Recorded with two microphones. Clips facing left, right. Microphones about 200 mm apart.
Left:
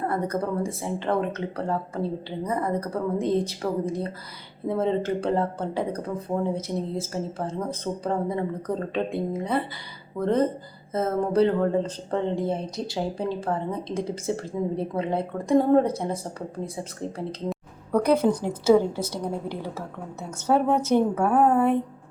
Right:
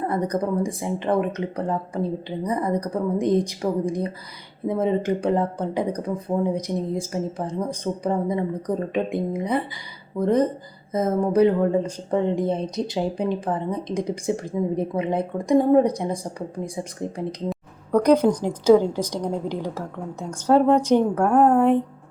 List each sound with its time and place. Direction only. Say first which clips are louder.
0.1 s speech: right 3 dB; 15° right (ahead or behind)
17.5 s a sound: right 3 dB; 5° left (ahead or behind)
18.1 s speech: right 4 dB; 15° right (ahead or behind)
20.3 s a woman's voice: right 5 dB; 10° left (ahead or behind)